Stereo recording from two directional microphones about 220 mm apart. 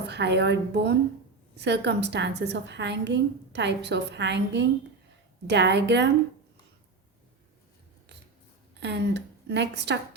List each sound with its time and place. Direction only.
0.1 s a woman's voice: 50° right (ahead or behind)
8.8 s a woman's voice: 50° right (ahead or behind)